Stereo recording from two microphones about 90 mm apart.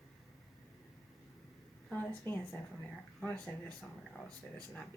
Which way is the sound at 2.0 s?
25° left (ahead or behind).